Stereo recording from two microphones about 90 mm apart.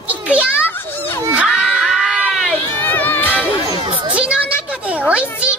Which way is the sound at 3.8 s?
80° right.